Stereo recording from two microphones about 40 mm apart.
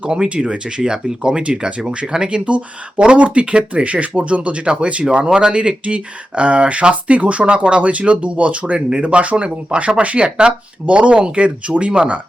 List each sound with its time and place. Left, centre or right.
0.1 s speech: right
1.4 s speech: right